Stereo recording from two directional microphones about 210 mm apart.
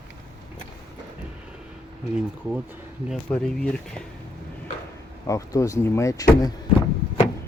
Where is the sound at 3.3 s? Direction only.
5° left (ahead or behind).